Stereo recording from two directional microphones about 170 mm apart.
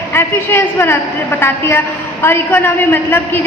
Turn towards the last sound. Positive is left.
turn(degrees=10)  # may be behind; listen again after turning